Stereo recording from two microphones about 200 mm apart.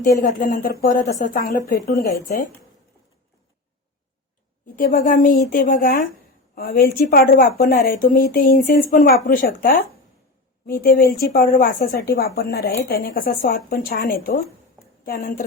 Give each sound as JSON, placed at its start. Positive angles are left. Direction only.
{"t": 0.2, "sound": "a woman's voice", "side_deg": 40}
{"t": 2.0, "sound": "speech", "side_deg": 15}
{"t": 4.8, "sound": "a woman's voice", "side_deg": 45}